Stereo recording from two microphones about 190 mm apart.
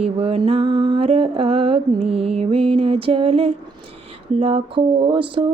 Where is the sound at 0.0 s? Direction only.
30° right (ahead or behind).